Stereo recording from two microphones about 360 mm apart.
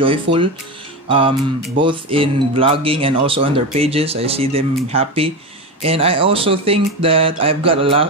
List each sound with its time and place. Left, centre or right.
0.0 s speech: centre
1.8 s speech: centre